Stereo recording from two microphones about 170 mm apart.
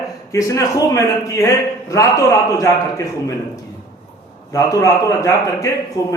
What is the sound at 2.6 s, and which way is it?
Speech, 20° left (ahead or behind).